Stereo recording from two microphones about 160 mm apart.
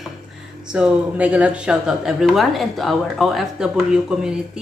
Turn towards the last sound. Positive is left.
turn(degrees=-5)  # may be behind; listen again after turning